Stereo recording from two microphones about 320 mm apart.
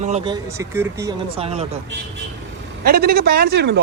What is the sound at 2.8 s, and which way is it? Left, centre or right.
Speech, right.